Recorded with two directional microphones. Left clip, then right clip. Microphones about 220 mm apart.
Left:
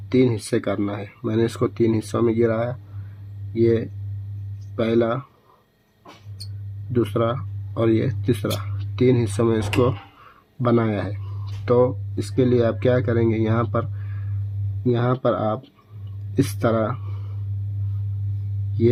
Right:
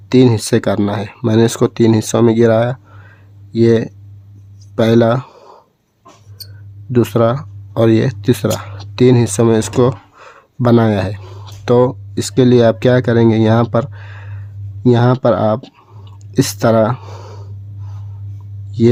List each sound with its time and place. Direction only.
0.1 s speech: 45° right (ahead or behind)
6.9 s speech: 45° right (ahead or behind)